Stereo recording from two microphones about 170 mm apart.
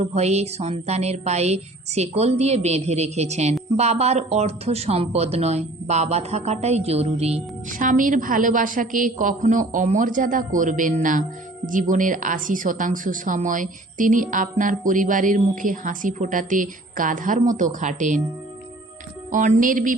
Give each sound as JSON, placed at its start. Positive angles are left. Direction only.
{"t": 0.0, "sound": "a sound", "side_deg": -40}
{"t": 3.8, "sound": "speech", "side_deg": -40}
{"t": 19.3, "sound": "speech", "side_deg": -50}